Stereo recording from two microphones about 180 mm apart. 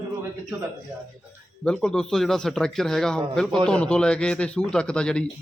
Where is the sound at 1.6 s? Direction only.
5° left (ahead or behind).